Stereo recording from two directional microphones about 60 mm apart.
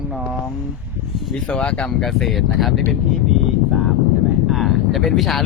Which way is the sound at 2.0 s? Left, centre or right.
Centre.